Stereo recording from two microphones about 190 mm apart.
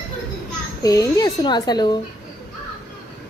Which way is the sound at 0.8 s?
20° left (ahead or behind).